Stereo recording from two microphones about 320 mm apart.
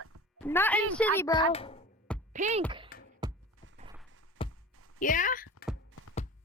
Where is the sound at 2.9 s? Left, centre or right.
Left.